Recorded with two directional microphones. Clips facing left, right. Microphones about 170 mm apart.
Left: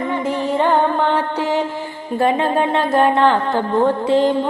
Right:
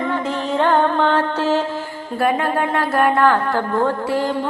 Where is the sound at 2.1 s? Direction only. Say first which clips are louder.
Left 2 dB; 20° left (ahead or behind).